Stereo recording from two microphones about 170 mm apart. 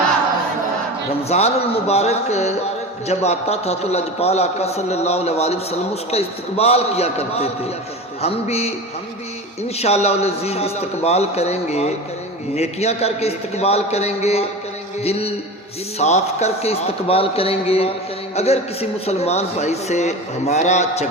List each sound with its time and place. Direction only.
1.3 s a man's voice: 40° left (ahead or behind)
9.8 s a man's voice: 40° left (ahead or behind)